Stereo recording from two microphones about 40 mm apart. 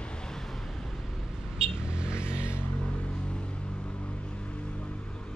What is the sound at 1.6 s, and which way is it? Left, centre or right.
Vehicle, right.